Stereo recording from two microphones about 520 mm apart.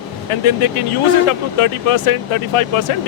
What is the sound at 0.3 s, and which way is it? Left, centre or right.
Speech, left.